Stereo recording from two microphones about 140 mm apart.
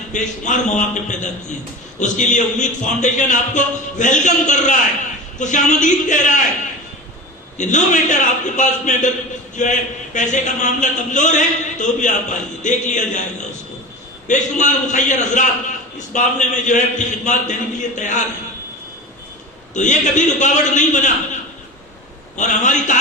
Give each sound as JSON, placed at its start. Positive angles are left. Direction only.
{"t": 0.1, "sound": "a man's voice", "side_deg": 60}
{"t": 7.6, "sound": "a man's voice", "side_deg": 60}
{"t": 14.3, "sound": "a man's voice", "side_deg": 60}
{"t": 19.7, "sound": "a man's voice", "side_deg": 60}
{"t": 22.4, "sound": "a man's voice", "side_deg": 60}